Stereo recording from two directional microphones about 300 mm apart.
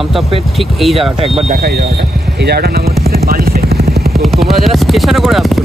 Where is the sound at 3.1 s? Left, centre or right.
Right.